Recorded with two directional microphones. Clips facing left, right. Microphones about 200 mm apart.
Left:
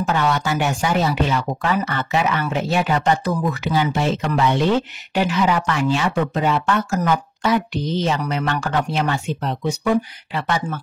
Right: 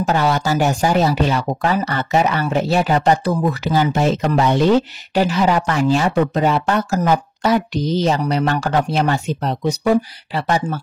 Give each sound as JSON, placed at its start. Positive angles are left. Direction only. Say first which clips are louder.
{"t": 0.0, "sound": "speech", "louder": "right 3 dB", "side_deg": -40}